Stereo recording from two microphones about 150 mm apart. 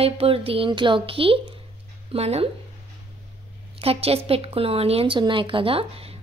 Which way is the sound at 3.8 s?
40° right (ahead or behind).